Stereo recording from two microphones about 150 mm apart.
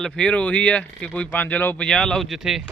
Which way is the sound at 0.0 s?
5° left (ahead or behind).